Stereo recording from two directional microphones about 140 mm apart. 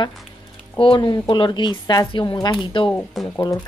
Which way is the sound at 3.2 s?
20° left (ahead or behind).